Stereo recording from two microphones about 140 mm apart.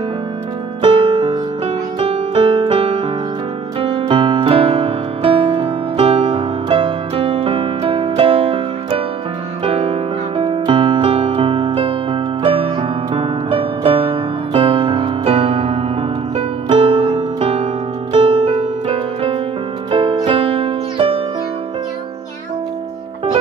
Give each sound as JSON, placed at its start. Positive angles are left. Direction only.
{"t": 0.8, "sound": "music", "side_deg": -40}